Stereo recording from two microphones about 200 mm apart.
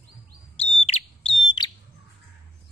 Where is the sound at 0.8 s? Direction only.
30° left (ahead or behind).